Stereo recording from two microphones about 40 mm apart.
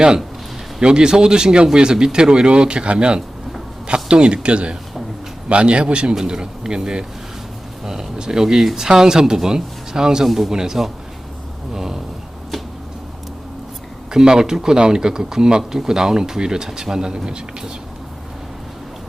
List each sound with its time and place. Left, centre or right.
0.8 s speech: centre
10.2 s a man's voice: centre
10.5 s speech: centre
11.7 s a sound: centre
14.1 s speech: centre